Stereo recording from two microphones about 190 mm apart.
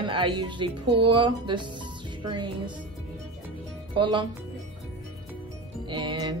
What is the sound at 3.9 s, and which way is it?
Speech, 25° right (ahead or behind).